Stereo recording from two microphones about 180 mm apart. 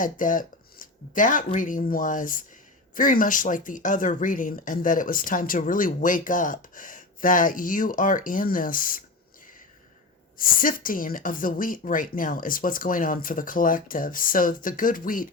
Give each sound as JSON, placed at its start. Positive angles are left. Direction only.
{"t": 0.0, "sound": "speech", "side_deg": 50}
{"t": 10.3, "sound": "speech", "side_deg": 50}